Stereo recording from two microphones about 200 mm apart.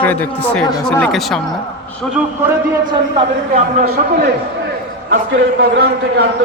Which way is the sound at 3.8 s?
55° right (ahead or behind).